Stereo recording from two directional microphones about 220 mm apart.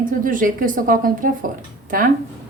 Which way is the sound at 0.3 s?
40° right (ahead or behind).